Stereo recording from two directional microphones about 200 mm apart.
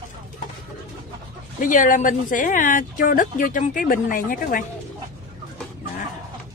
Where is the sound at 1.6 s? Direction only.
40° left (ahead or behind).